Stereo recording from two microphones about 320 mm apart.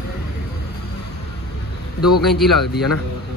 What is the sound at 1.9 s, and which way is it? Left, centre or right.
Speech, left.